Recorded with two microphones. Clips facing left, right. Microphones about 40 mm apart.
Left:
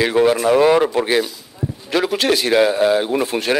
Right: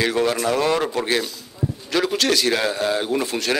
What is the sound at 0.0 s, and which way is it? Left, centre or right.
Speech, centre.